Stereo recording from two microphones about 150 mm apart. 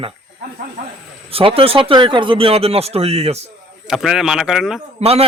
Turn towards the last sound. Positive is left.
turn(degrees=-45)  # may be behind; listen again after turning